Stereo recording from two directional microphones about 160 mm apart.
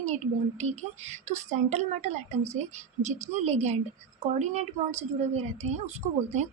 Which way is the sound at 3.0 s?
45° right (ahead or behind).